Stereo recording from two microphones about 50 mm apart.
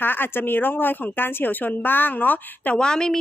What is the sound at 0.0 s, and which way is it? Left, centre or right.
A woman's voice, left.